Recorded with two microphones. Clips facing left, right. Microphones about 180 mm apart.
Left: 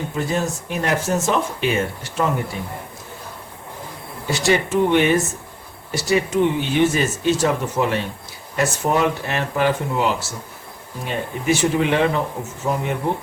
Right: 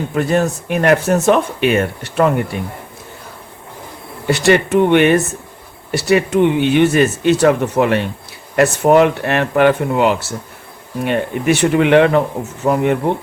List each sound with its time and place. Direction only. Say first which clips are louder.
0.1 s speech: right 8 dB; 65° right (ahead or behind)
4.3 s speech: right 6 dB; 65° right (ahead or behind)